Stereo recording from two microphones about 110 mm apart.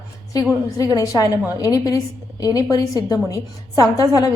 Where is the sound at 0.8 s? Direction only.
30° left (ahead or behind).